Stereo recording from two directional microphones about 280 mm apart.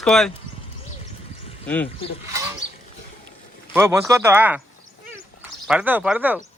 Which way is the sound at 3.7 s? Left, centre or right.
Centre.